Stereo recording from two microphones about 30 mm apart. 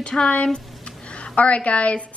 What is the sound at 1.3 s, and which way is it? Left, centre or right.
Speech, left.